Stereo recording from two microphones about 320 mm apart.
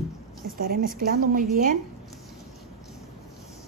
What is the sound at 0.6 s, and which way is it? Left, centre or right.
A woman's voice, right.